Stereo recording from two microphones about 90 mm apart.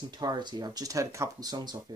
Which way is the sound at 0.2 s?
50° right (ahead or behind).